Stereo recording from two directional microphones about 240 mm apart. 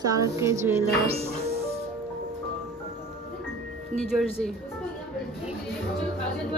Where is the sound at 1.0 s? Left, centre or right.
Right.